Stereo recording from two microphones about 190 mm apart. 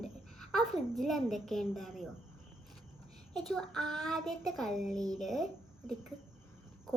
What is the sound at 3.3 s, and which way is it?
A child's voice, 5° left (ahead or behind).